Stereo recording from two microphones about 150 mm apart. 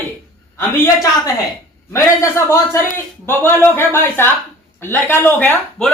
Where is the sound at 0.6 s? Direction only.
20° left (ahead or behind).